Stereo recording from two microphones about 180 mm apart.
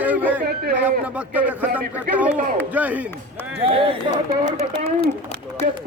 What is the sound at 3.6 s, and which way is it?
Speech, 30° right (ahead or behind).